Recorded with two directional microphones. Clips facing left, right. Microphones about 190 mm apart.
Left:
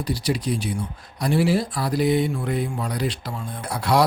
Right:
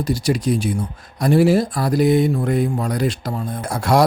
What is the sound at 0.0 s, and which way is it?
Speech, 45° right (ahead or behind).